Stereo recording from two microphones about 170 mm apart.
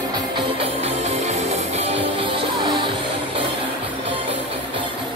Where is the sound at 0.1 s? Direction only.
25° right (ahead or behind).